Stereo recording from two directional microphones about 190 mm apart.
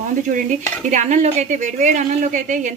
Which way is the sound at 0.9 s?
40° right (ahead or behind).